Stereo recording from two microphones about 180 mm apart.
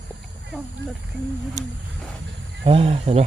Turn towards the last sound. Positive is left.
turn(degrees=-35)  # may be behind; listen again after turning